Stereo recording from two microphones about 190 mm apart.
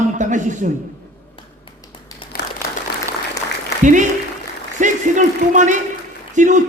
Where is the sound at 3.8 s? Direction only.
40° right (ahead or behind).